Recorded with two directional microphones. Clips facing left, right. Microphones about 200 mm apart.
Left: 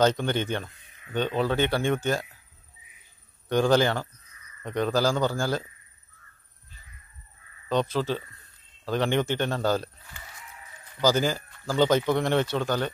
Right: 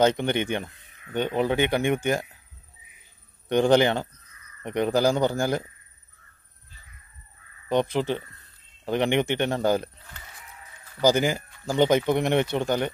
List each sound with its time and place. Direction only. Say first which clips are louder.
0.0 s speech: right 2 dB; 15° right (ahead or behind)
3.4 s a man's voice: right 2 dB; 20° right (ahead or behind)
7.6 s speech: right 2 dB; 15° right (ahead or behind)
11.0 s speech: right 2 dB; 15° right (ahead or behind)